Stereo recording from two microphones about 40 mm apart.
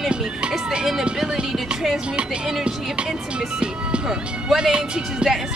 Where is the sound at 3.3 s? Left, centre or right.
Right.